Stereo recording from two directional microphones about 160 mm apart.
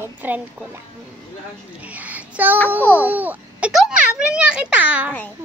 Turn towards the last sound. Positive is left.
turn(degrees=-10)  # may be behind; listen again after turning